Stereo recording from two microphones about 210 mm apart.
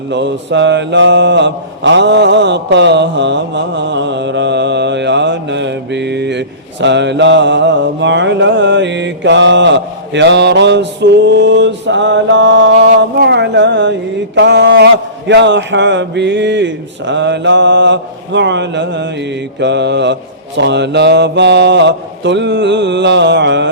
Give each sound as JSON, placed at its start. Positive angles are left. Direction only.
{"t": 0.1, "sound": "mantra", "side_deg": -55}
{"t": 14.3, "sound": "speech", "side_deg": -55}